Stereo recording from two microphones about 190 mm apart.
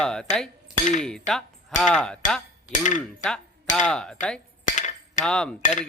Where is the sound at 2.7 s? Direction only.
40° left (ahead or behind).